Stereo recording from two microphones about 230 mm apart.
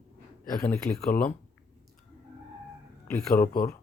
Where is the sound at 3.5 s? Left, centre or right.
Left.